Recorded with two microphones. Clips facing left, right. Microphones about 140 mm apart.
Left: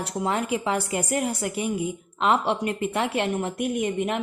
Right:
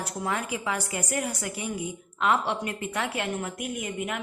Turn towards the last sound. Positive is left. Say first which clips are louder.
# left 7 dB
turn(degrees=25)  # may be behind; listen again after turning